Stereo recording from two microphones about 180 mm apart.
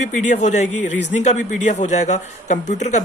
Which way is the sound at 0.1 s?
40° left (ahead or behind).